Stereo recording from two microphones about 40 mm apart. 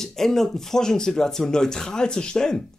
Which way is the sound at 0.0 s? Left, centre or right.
Centre.